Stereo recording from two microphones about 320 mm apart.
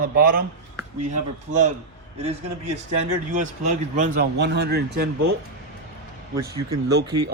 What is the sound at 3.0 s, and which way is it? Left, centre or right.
Speech, right.